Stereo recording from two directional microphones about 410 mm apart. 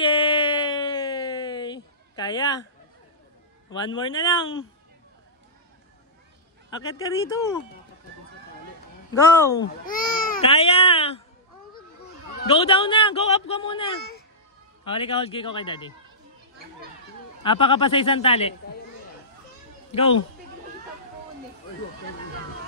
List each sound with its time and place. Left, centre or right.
0.0 s a sound: centre
3.7 s a man's voice: centre
6.7 s a man's voice: centre
9.1 s a man's voice: centre
9.8 s speech: centre
12.4 s a man's voice: centre
15.0 s a man's voice: centre
17.4 s a man's voice: centre
19.9 s speech: centre